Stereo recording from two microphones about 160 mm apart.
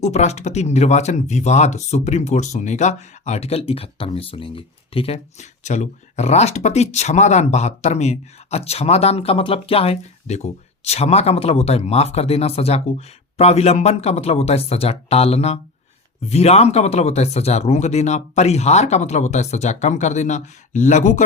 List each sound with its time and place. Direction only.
0.0 s speech: 45° left (ahead or behind)